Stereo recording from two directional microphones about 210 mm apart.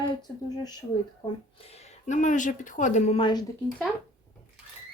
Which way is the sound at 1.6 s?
30° left (ahead or behind).